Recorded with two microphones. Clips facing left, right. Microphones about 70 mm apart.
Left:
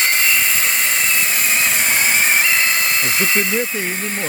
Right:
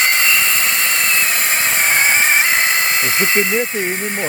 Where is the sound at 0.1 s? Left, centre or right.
Right.